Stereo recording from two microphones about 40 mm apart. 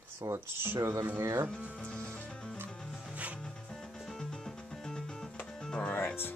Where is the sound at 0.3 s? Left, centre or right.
Right.